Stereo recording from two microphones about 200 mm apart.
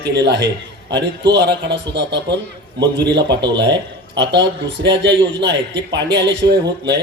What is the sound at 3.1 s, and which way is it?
A man's voice, 60° right (ahead or behind).